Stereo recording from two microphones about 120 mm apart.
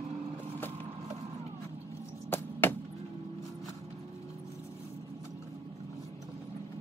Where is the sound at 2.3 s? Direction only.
15° left (ahead or behind).